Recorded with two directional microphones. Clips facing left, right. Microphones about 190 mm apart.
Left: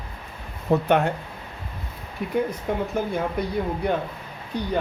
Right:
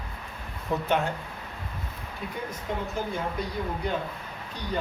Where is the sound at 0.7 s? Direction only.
60° left (ahead or behind).